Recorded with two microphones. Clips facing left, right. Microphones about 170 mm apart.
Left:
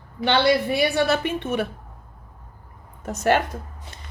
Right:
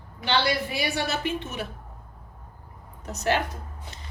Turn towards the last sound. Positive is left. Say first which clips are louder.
# left 4 dB
turn(degrees=55)  # may be behind; listen again after turning